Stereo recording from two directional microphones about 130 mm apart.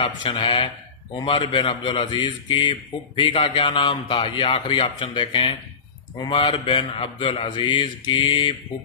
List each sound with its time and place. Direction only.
0.0 s a man's voice: 40° left (ahead or behind)